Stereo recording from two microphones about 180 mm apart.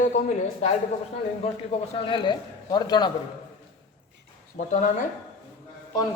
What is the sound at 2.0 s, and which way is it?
Speech, 25° left (ahead or behind).